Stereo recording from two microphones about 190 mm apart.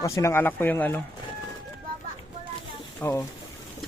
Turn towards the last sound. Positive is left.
turn(degrees=10)  # may be behind; listen again after turning